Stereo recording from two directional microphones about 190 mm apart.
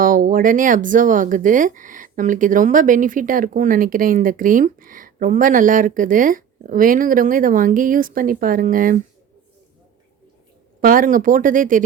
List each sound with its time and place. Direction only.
0.0 s speech: 45° right (ahead or behind)
10.8 s speech: 50° right (ahead or behind)